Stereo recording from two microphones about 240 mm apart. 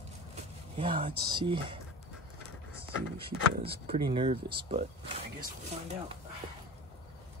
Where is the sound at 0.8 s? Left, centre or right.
Right.